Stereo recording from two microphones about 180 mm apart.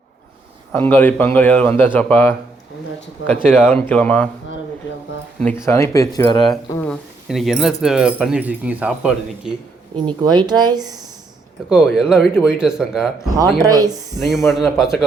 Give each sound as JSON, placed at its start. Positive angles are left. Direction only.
{"t": 0.7, "sound": "a man's voice", "side_deg": 10}
{"t": 3.4, "sound": "a man's voice", "side_deg": 10}
{"t": 5.6, "sound": "a man's voice", "side_deg": 15}
{"t": 6.8, "sound": "speech", "side_deg": 0}
{"t": 10.1, "sound": "speech", "side_deg": -25}
{"t": 11.7, "sound": "speech", "side_deg": 0}
{"t": 13.6, "sound": "speech", "side_deg": -20}
{"t": 14.3, "sound": "speech", "side_deg": 0}